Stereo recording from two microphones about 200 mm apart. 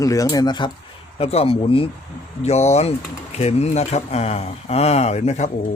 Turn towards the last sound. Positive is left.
turn(degrees=35)  # may be behind; listen again after turning